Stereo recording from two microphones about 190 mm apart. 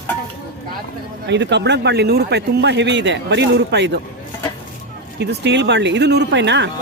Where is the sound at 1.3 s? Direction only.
65° right (ahead or behind).